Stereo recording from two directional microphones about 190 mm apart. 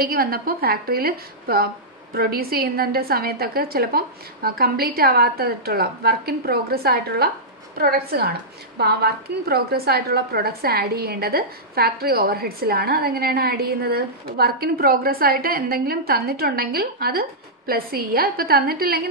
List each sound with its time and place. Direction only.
0.0 s a woman's voice: 50° right (ahead or behind)